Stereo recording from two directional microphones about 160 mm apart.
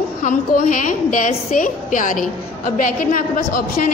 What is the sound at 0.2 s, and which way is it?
A woman's voice, 55° left (ahead or behind).